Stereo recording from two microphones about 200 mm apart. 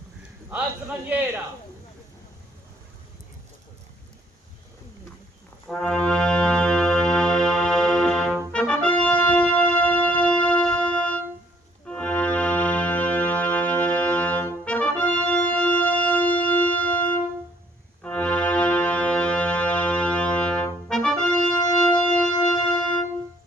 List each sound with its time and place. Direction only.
5.6 s brass instrument: centre (ahead or behind)
11.9 s organ: 5° left (ahead or behind)
18.0 s music: 5° left (ahead or behind)